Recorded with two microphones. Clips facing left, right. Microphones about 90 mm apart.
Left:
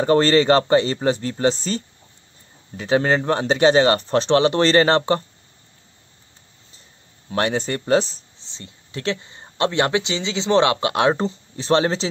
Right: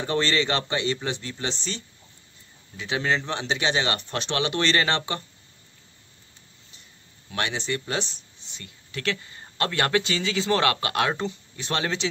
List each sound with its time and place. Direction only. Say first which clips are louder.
0.0 s speech: left 9 dB; 45° left (ahead or behind)
2.8 s speech: left 7 dB; 40° left (ahead or behind)
7.2 s speech: left 7 dB; 40° left (ahead or behind)